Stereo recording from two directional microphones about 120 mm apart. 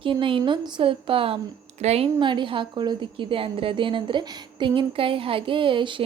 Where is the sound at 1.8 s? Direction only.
60° right (ahead or behind).